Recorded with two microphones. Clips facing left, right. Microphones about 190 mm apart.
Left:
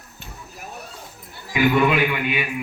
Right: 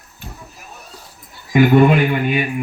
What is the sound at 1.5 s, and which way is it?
Speech, 50° right (ahead or behind).